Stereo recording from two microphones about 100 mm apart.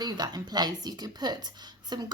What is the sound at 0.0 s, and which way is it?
Speech, 45° right (ahead or behind).